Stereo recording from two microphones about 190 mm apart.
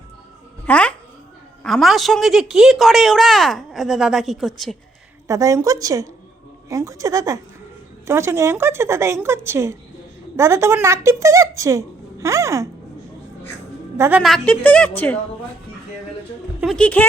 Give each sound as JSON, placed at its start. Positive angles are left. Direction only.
{"t": 0.6, "sound": "speech", "side_deg": 5}
{"t": 5.3, "sound": "a woman's voice", "side_deg": -15}
{"t": 13.9, "sound": "a woman's voice", "side_deg": -15}
{"t": 14.2, "sound": "a woman's voice", "side_deg": 0}
{"t": 16.6, "sound": "speech", "side_deg": 5}